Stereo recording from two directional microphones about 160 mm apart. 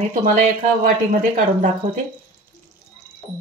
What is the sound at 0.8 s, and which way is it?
Speech, 60° right (ahead or behind).